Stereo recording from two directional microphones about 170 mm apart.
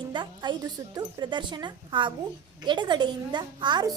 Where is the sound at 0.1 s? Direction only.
25° right (ahead or behind).